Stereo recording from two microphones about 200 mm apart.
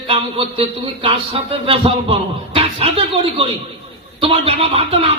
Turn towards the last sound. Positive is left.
turn(degrees=-30)  # may be behind; listen again after turning